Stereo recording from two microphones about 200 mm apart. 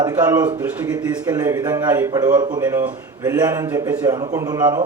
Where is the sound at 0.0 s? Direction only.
20° right (ahead or behind).